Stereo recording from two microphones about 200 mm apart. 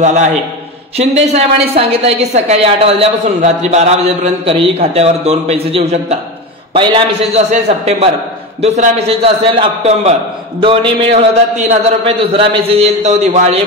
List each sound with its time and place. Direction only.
0.0 s a woman's voice: 35° right (ahead or behind)